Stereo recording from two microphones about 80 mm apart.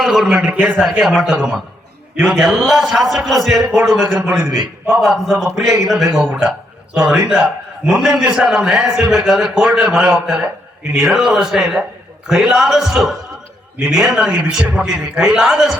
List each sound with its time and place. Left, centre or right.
0.0 s a man's voice: centre
0.5 s a man's voice: right